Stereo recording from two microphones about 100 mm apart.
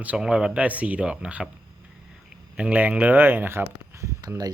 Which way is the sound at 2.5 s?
15° right (ahead or behind).